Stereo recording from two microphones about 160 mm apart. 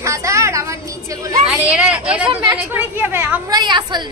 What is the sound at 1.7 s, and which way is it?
A woman's voice, 5° right (ahead or behind).